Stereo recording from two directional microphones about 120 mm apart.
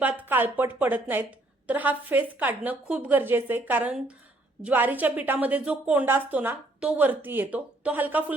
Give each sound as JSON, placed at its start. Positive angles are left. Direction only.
{"t": 0.0, "sound": "a woman's voice", "side_deg": -15}